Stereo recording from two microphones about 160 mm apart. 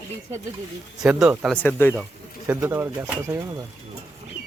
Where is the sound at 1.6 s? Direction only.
15° left (ahead or behind).